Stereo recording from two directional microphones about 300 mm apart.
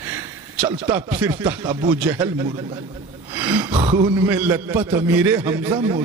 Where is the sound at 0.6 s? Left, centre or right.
Centre.